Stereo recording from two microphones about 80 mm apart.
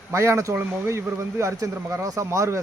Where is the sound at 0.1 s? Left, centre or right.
Right.